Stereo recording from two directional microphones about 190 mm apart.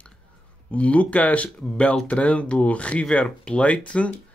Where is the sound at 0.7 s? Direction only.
5° left (ahead or behind).